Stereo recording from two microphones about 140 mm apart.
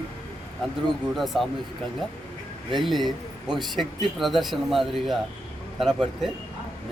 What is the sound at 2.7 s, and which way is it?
Speech, centre (ahead or behind).